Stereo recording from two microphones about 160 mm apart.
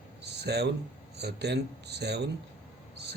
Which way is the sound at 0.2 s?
90° right.